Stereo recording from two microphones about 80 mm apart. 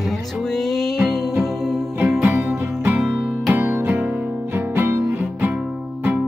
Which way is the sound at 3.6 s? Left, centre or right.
Right.